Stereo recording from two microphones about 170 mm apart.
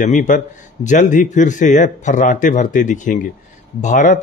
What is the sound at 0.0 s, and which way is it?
Speech, 45° left (ahead or behind).